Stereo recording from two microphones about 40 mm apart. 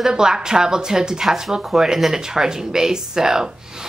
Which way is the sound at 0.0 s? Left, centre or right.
Centre.